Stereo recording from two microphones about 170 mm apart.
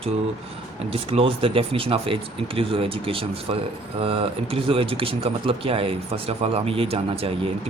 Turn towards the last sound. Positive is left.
turn(degrees=-35)  # may be behind; listen again after turning